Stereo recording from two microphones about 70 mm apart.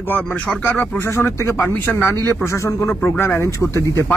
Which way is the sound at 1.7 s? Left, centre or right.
Left.